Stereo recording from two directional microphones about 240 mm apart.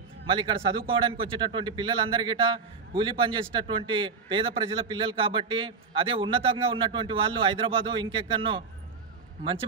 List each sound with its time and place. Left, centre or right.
0.3 s a man's voice: centre